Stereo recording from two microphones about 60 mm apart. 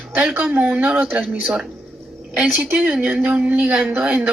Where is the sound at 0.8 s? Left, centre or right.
Right.